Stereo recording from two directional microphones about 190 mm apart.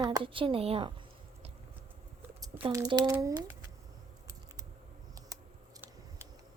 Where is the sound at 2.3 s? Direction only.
25° right (ahead or behind).